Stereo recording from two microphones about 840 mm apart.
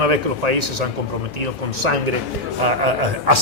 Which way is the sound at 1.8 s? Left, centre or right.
Right.